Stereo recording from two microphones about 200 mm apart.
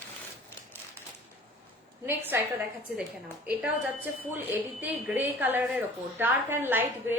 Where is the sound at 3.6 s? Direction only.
10° right (ahead or behind).